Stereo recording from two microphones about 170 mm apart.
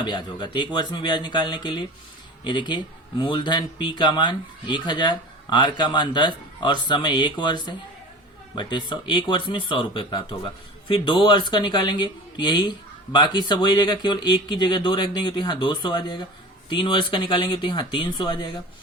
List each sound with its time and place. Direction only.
0.0 s speech: 25° left (ahead or behind)